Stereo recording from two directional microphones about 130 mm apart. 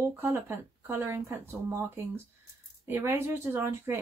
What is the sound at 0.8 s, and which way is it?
Speech, 20° right (ahead or behind).